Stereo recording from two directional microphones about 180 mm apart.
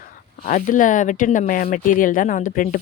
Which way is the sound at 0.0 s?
50° left (ahead or behind).